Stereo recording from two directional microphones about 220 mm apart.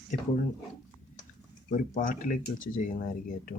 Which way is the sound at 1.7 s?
35° left (ahead or behind).